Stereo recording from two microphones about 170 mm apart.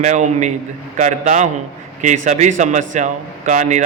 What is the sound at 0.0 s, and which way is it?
A man's voice, 45° right (ahead or behind).